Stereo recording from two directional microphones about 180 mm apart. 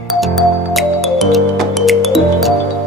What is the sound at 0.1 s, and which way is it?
Music, centre (ahead or behind).